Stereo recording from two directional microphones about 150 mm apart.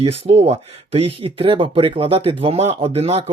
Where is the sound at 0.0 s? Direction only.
40° right (ahead or behind).